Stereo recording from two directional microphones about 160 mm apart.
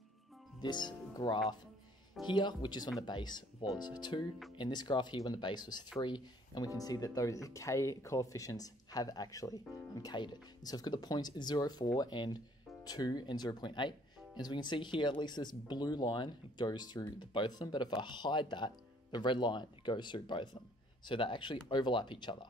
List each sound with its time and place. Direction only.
0.6 s speech: 25° left (ahead or behind)